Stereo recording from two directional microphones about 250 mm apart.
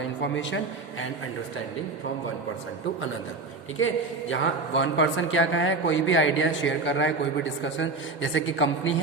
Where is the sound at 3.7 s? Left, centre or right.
Left.